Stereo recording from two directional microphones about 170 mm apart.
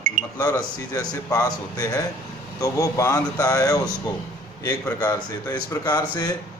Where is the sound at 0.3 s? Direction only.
20° left (ahead or behind).